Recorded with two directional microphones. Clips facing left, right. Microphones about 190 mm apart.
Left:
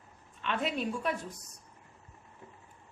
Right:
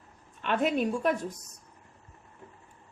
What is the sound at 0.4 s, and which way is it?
Speech, 50° right (ahead or behind).